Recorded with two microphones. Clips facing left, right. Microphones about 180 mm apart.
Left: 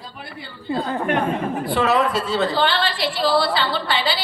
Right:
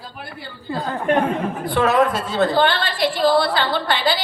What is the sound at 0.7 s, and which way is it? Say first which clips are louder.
Speech: left 3 dB; 20° left (ahead or behind).